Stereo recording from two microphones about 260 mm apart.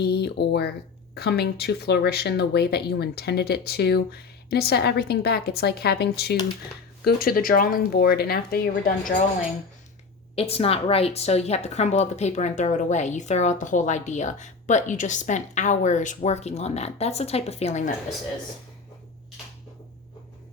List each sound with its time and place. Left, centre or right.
0.0 s speech: left
10.3 s a woman's voice: left